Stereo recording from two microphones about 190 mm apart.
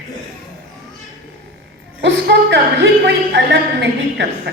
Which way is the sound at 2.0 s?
70° right (ahead or behind).